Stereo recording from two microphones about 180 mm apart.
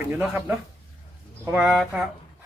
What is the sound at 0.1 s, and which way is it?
Speech, 10° right (ahead or behind).